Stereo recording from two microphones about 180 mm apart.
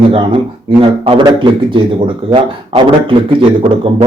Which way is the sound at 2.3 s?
30° right (ahead or behind).